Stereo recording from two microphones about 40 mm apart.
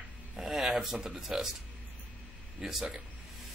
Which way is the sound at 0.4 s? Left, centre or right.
Centre.